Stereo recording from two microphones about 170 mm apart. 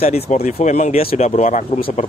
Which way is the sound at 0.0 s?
40° left (ahead or behind).